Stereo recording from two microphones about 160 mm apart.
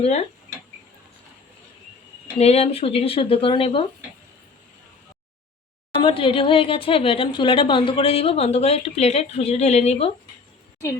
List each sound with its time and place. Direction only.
0.0 s speech: 45° left (ahead or behind)
2.4 s speech: 40° left (ahead or behind)
6.0 s speech: 35° left (ahead or behind)